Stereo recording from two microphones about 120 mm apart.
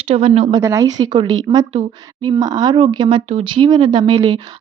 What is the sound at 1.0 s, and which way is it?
Speech, 40° right (ahead or behind).